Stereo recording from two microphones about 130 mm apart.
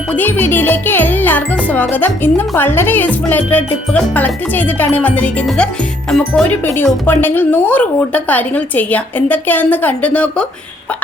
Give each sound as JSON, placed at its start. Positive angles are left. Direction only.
{"t": 0.2, "sound": "speech", "side_deg": 15}
{"t": 6.5, "sound": "speech", "side_deg": 15}